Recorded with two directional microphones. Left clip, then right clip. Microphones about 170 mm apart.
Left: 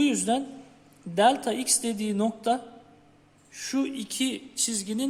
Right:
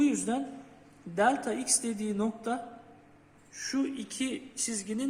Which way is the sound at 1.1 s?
55° left (ahead or behind).